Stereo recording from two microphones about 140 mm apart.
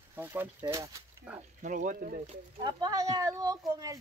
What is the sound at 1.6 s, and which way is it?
Speech, 65° right (ahead or behind).